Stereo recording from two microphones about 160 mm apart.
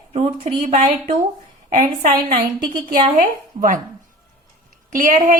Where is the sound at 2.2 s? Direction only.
35° right (ahead or behind).